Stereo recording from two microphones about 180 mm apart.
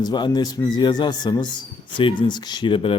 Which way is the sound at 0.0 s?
25° left (ahead or behind).